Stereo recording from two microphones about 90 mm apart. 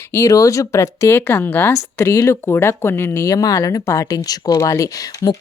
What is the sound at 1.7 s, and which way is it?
Speech, 35° left (ahead or behind).